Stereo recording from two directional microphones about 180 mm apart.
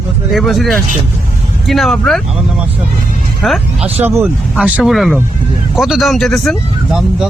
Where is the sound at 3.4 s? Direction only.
Centre (ahead or behind).